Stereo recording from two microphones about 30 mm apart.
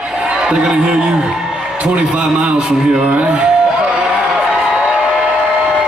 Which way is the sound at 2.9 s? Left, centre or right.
Right.